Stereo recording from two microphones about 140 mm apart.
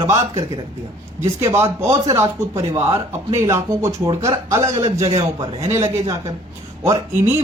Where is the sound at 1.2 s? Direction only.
20° right (ahead or behind).